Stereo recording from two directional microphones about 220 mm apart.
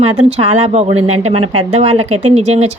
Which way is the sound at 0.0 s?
30° right (ahead or behind).